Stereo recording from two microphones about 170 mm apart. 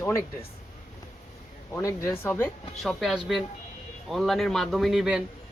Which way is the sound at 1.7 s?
15° left (ahead or behind).